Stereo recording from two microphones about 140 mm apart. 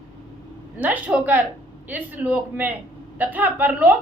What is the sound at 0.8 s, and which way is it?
A woman's voice, 10° right (ahead or behind).